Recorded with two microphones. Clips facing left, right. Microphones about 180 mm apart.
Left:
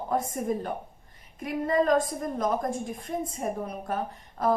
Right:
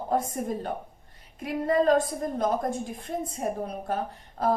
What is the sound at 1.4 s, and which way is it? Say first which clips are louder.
A woman's voice: right 2 dB; 30° right (ahead or behind).